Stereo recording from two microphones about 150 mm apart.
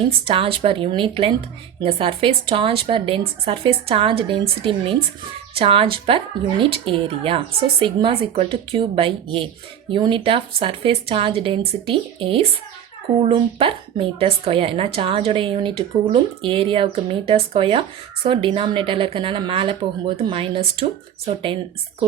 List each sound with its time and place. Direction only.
0.3 s speech: 40° right (ahead or behind)